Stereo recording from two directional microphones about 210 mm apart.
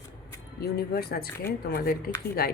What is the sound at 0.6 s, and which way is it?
Speech, 50° left (ahead or behind).